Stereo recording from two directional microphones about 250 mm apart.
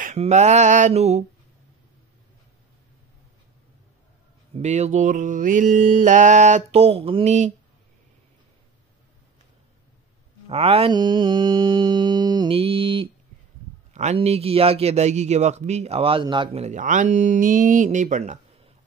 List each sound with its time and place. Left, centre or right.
0.0 s a man's voice: right
4.6 s a man's voice: right
10.5 s a man's voice: right